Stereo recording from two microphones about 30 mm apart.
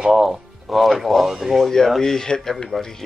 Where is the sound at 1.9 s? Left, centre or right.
Centre.